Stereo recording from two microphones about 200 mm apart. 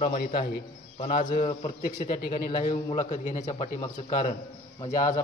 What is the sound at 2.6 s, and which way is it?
Speech, 35° left (ahead or behind).